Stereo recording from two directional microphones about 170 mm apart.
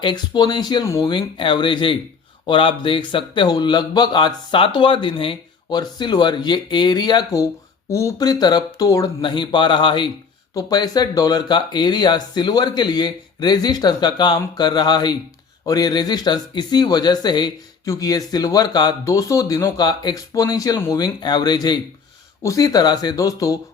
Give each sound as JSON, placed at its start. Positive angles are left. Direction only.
{"t": 0.0, "sound": "speech", "side_deg": 25}